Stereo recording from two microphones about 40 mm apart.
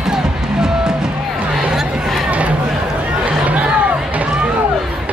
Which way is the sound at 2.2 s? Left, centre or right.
Right.